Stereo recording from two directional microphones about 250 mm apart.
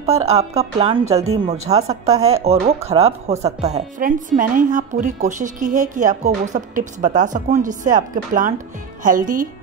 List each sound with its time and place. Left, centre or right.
0.0 s a woman's voice: right